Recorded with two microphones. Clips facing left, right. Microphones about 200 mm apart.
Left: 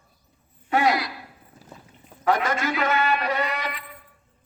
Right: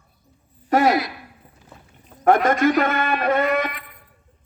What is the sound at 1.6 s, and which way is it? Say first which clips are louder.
Clip-clop: left 2 dB; 35° left (ahead or behind).